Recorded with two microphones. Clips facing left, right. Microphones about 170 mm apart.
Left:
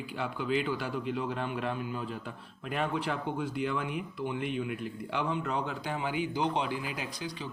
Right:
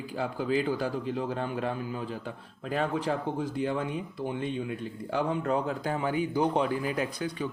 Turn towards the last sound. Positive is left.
turn(degrees=-45)  # may be behind; listen again after turning